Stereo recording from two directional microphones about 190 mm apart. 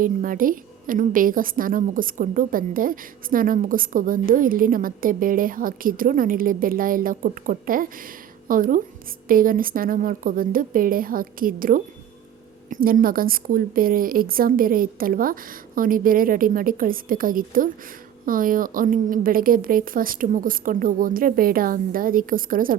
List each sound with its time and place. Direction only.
0.0 s a woman's voice: 45° right (ahead or behind)